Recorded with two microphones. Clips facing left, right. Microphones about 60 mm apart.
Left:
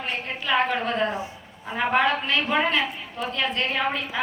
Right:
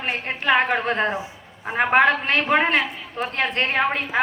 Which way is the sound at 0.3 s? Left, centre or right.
Right.